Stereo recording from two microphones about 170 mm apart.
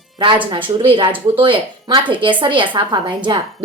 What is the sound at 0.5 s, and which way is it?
A woman's voice, 25° right (ahead or behind).